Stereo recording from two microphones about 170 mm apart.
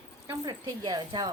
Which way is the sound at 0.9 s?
25° right (ahead or behind).